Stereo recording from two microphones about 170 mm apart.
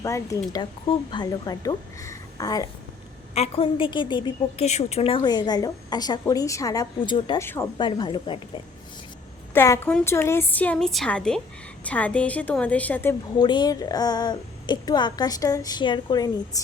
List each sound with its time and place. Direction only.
0.0 s a woman's voice: 20° left (ahead or behind)
3.3 s a woman's voice: 35° left (ahead or behind)
7.4 s a woman's voice: 15° left (ahead or behind)
7.8 s a woman's voice: 30° left (ahead or behind)
9.5 s a woman's voice: 15° left (ahead or behind)
13.4 s a woman's voice: 25° left (ahead or behind)